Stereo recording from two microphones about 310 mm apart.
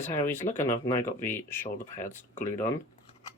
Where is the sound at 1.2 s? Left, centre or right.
Centre.